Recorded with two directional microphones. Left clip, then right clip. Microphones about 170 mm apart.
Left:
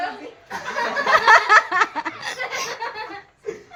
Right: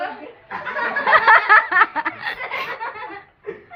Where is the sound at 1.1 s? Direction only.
25° left (ahead or behind).